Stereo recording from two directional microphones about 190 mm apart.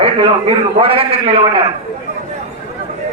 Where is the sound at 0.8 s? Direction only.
30° right (ahead or behind).